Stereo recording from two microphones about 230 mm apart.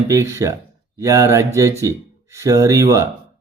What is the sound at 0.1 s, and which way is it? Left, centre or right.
Speech, centre.